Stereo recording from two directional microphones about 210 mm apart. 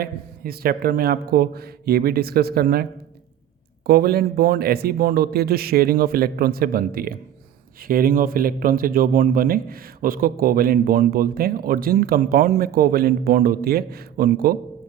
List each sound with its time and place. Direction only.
0.0 s speech: 45° right (ahead or behind)
3.8 s speech: 45° right (ahead or behind)